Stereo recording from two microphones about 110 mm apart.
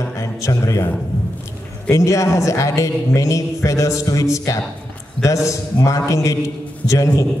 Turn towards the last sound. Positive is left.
turn(degrees=30)  # may be behind; listen again after turning